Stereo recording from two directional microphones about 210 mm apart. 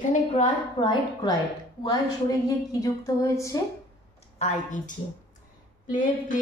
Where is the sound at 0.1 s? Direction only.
30° left (ahead or behind).